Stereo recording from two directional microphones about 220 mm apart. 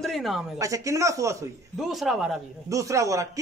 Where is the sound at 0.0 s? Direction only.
Centre (ahead or behind).